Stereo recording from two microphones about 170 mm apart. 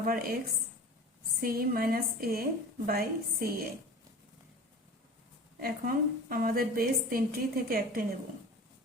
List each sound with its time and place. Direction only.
0.0 s a woman's voice: 60° right (ahead or behind)
1.4 s a woman's voice: 60° right (ahead or behind)
5.5 s a woman's voice: 60° right (ahead or behind)